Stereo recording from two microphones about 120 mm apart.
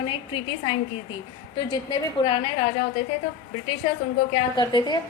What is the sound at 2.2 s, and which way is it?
Speech, 45° left (ahead or behind).